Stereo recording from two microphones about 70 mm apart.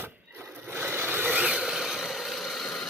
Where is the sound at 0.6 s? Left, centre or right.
Right.